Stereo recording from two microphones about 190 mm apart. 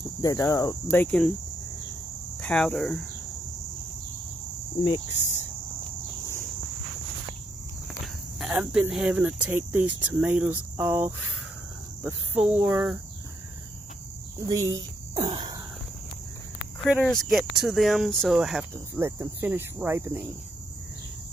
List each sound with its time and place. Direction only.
0.0 s cricket: 15° left (ahead or behind)
2.4 s speech: centre (ahead or behind)
8.4 s speech: 5° right (ahead or behind)
14.4 s speech: 15° right (ahead or behind)
15.2 s a sound: 25° right (ahead or behind)
16.9 s speech: centre (ahead or behind)
18.9 s speech: 15° right (ahead or behind)